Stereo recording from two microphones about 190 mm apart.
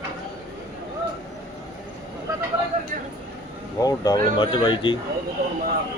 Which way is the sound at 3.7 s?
20° left (ahead or behind).